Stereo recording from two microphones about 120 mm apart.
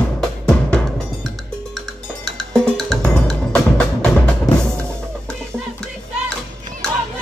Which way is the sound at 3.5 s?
10° left (ahead or behind).